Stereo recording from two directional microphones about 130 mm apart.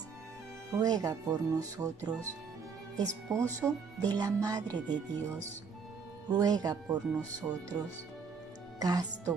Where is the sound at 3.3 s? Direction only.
25° right (ahead or behind).